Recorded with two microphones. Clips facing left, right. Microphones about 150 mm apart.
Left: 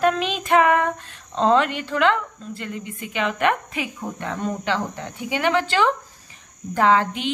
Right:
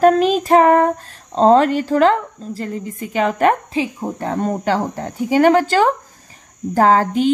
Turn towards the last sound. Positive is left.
turn(degrees=-40)  # may be behind; listen again after turning